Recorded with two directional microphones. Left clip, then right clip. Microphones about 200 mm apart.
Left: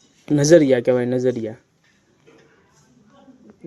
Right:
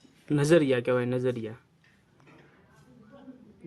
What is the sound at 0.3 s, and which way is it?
Speech, 20° left (ahead or behind).